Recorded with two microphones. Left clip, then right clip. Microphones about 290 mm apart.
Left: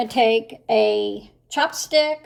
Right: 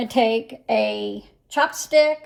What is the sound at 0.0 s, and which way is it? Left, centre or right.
Speech, centre.